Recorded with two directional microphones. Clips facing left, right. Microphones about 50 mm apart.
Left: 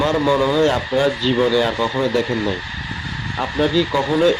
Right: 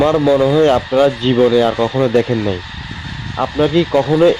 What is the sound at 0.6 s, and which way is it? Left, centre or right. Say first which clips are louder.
Speech: right 5 dB; right.